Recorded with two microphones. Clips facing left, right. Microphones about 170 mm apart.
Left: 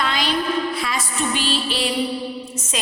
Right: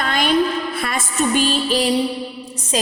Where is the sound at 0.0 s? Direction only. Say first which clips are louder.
Right 2 dB; 50° right (ahead or behind).